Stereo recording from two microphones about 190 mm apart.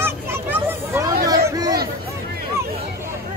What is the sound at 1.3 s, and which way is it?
Chatter, 20° right (ahead or behind).